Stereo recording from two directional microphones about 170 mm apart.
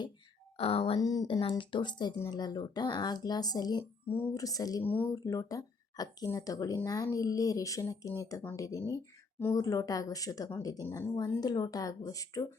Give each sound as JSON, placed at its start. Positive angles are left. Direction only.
{"t": 0.5, "sound": "speech", "side_deg": 35}
{"t": 0.9, "sound": "speech", "side_deg": 20}